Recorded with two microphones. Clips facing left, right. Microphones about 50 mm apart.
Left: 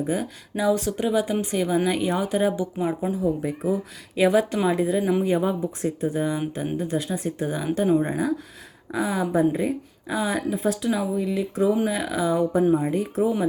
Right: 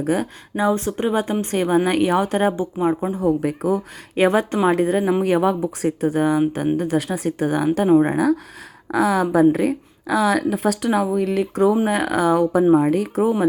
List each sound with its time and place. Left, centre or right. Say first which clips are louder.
0.0 s a woman's voice: right 5 dB; right
0.5 s speech: right 2 dB; right
3.1 s a woman's voice: right 5 dB; right
4.1 s speech: right 2 dB; right
5.2 s a woman's voice: right 5 dB; right
10.9 s a woman's voice: right 6 dB; right